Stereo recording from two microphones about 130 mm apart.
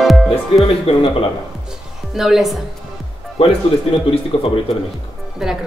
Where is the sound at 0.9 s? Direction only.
50° left (ahead or behind).